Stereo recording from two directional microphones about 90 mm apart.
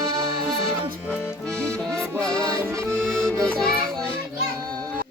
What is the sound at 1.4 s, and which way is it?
Accordion, 10° left (ahead or behind).